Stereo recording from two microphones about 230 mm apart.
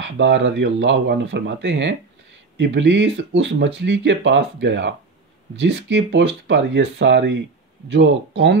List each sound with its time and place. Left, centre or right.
0.0 s speech: right